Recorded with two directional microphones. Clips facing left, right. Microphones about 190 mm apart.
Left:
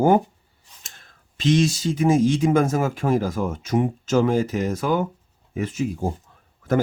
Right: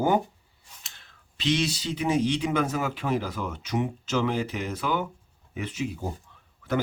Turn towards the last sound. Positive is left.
turn(degrees=45)  # may be behind; listen again after turning